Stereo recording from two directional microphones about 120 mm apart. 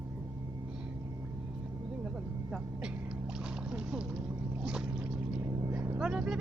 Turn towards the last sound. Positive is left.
turn(degrees=-5)  # may be behind; listen again after turning